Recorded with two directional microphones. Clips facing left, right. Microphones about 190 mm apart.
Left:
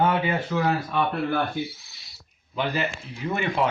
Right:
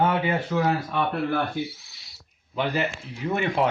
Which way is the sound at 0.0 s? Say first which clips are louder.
Even; 30° right (ahead or behind).